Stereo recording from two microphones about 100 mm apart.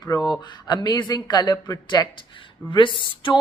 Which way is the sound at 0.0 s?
40° left (ahead or behind).